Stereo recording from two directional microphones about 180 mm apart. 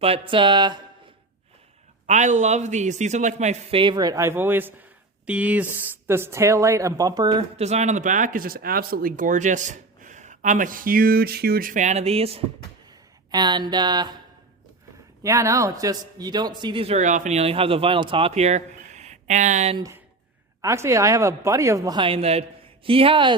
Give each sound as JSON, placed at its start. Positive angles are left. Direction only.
{"t": 0.0, "sound": "speech", "side_deg": -30}
{"t": 2.0, "sound": "a man's voice", "side_deg": -40}
{"t": 7.5, "sound": "speech", "side_deg": -35}
{"t": 15.2, "sound": "a man's voice", "side_deg": -15}
{"t": 19.7, "sound": "speech", "side_deg": -20}